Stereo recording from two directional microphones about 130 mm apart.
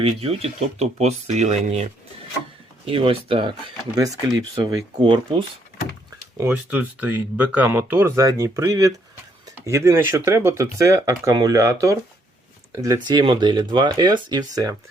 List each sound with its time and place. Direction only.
0.0 s speech: 50° right (ahead or behind)
2.8 s speech: 45° right (ahead or behind)
6.3 s speech: 20° right (ahead or behind)